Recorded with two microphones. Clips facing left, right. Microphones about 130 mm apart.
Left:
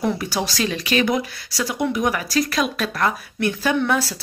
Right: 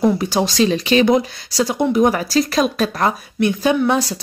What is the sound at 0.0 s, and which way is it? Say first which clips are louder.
Speech: right 6 dB; 25° right (ahead or behind).